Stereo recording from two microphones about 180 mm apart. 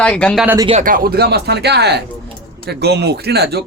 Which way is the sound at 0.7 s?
45° right (ahead or behind).